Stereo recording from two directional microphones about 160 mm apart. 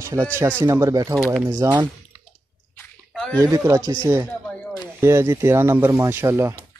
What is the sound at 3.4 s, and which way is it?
Speech, 20° right (ahead or behind).